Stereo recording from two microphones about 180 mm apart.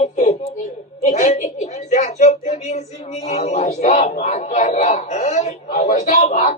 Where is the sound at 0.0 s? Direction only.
40° left (ahead or behind).